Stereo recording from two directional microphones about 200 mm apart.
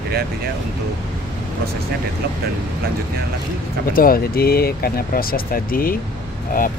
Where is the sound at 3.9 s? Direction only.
45° left (ahead or behind).